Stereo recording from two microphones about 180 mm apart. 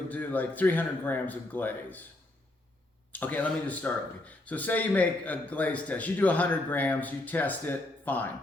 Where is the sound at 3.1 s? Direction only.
10° left (ahead or behind).